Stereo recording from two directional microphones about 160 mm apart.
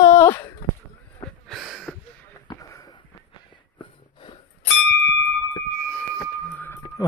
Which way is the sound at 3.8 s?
30° left (ahead or behind).